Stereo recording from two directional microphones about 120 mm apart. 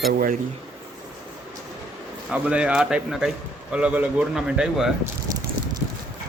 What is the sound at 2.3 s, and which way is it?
Speech, 10° right (ahead or behind).